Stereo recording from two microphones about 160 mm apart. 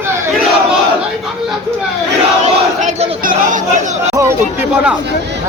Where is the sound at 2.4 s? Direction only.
40° right (ahead or behind).